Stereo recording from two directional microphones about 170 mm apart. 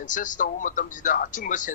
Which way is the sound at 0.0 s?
50° left (ahead or behind).